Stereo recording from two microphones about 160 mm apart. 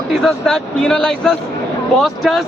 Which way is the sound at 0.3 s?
5° left (ahead or behind).